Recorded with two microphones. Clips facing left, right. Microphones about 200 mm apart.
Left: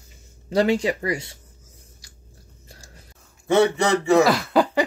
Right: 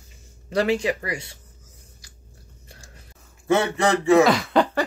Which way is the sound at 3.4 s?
Centre (ahead or behind).